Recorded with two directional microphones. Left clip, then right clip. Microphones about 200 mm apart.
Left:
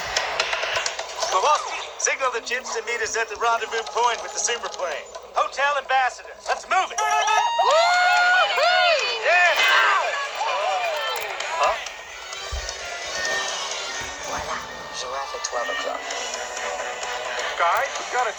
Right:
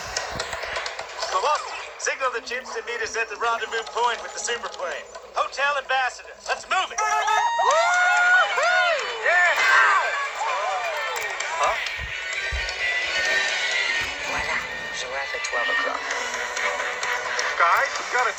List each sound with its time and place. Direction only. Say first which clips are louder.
0.1 s a man's voice: left 6 dB; 30° left (ahead or behind)
7.1 s crowd: left 1 dB; 20° left (ahead or behind)
12.8 s music: right 6 dB; 15° left (ahead or behind)
15.5 s speech: right 3 dB; 25° left (ahead or behind)